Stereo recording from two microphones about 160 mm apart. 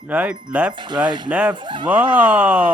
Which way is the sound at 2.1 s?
10° right (ahead or behind).